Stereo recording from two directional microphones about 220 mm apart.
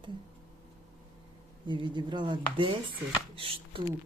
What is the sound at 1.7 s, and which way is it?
Speech, 20° right (ahead or behind).